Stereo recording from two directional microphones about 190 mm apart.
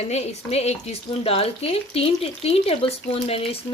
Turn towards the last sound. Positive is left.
turn(degrees=30)  # may be behind; listen again after turning